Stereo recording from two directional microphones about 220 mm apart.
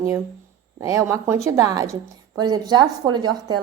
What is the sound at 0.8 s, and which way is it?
A woman's voice, 15° right (ahead or behind).